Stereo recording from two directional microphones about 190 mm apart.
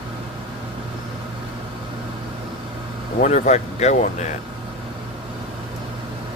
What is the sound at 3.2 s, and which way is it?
Speech, 40° left (ahead or behind).